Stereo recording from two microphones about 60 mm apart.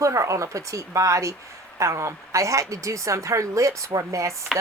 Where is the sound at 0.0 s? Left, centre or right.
Right.